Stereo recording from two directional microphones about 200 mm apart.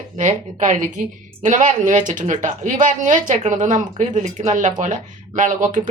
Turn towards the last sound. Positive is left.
turn(degrees=-40)  # may be behind; listen again after turning